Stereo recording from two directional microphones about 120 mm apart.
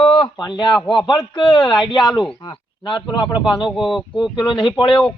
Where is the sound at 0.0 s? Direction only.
55° left (ahead or behind).